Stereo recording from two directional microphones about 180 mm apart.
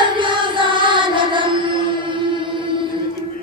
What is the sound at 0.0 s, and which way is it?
Music, 25° right (ahead or behind).